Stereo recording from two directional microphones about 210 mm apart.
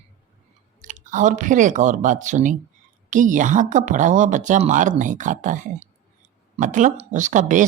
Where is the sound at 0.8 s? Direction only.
40° right (ahead or behind).